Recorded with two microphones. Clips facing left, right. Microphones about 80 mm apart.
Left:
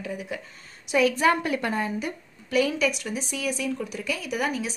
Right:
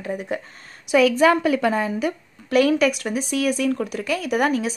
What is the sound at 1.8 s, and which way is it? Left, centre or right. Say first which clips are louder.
A woman's voice: right 6 dB; right.